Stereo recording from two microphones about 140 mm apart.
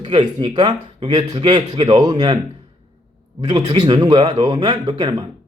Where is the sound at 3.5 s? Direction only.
35° right (ahead or behind).